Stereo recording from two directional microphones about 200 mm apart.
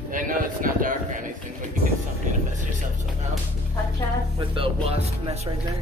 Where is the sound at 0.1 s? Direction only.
45° right (ahead or behind).